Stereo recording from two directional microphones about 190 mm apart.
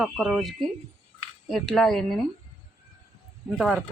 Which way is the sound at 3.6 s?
Centre (ahead or behind).